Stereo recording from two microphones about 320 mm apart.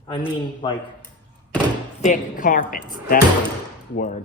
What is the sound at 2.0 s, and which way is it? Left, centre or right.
Speech, left.